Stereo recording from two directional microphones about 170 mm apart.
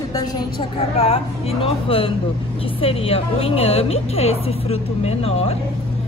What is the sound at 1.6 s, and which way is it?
A woman's voice, 35° left (ahead or behind).